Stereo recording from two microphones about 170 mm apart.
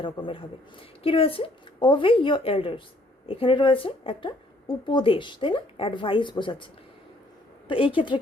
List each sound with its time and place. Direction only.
0.0 s a woman's voice: 30° left (ahead or behind)
7.9 s a woman's voice: 30° left (ahead or behind)